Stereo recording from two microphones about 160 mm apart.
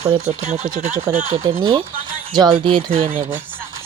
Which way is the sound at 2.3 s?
25° right (ahead or behind).